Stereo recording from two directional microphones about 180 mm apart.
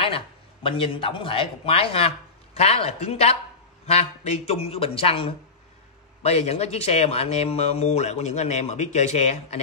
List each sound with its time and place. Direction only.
0.7 s speech: 30° left (ahead or behind)